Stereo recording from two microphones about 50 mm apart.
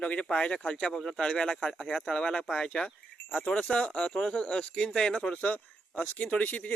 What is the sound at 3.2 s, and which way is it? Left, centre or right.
Speech, left.